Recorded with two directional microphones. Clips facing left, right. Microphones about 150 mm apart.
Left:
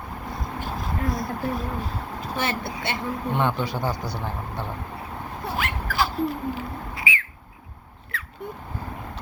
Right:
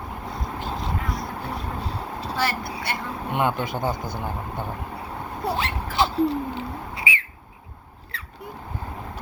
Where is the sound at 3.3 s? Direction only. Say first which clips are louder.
Right 2 dB; 15° right (ahead or behind).